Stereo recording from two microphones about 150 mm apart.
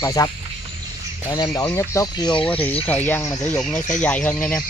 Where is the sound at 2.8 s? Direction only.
10° left (ahead or behind).